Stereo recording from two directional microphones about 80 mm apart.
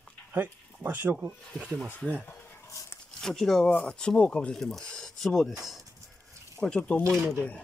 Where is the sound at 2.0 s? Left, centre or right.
Centre.